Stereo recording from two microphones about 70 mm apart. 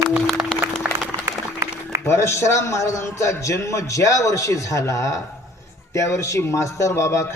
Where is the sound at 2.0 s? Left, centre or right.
Left.